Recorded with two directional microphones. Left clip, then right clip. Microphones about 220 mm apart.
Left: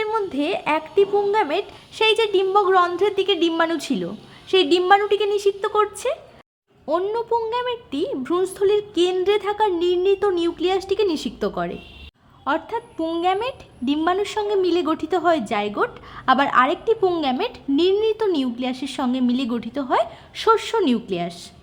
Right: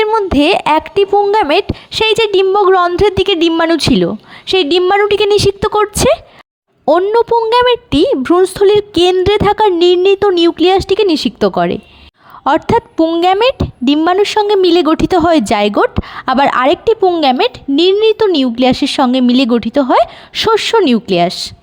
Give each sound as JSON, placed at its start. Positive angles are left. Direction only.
{"t": 0.0, "sound": "a woman's voice", "side_deg": -40}